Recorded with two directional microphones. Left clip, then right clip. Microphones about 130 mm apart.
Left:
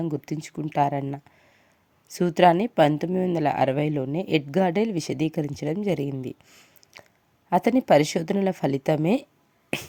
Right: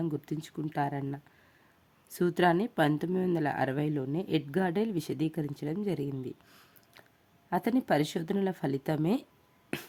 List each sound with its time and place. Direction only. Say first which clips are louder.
0.1 s speech: left 6 dB; 35° left (ahead or behind)
2.1 s speech: left 8 dB; 35° left (ahead or behind)
6.9 s chewing: left 9 dB; 35° left (ahead or behind)
7.5 s speech: left 10 dB; 45° left (ahead or behind)